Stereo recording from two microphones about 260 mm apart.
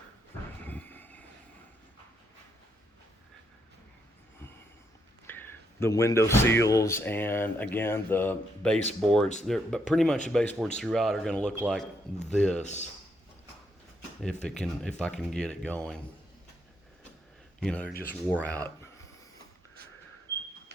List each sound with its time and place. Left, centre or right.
0.6 s a sound: centre
5.2 s speech: centre
12.6 s speech: left
14.4 s speech: centre
17.6 s speech: centre